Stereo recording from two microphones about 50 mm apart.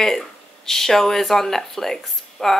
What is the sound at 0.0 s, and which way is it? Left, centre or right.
Speech, centre.